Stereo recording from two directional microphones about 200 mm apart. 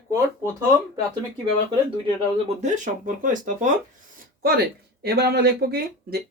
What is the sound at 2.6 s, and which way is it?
Speech, 40° right (ahead or behind).